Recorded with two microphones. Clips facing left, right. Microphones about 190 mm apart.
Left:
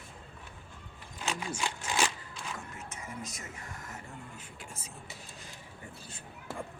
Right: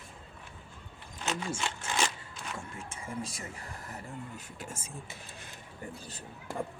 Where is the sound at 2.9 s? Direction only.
30° right (ahead or behind); by 5.4 s 50° right (ahead or behind).